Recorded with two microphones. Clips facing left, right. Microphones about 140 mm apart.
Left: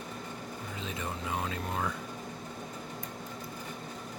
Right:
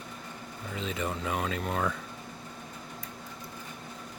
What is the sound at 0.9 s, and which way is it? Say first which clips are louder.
Speech: right 3 dB; 85° right.